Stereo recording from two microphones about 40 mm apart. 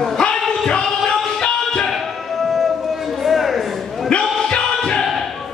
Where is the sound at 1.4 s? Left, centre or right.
Left.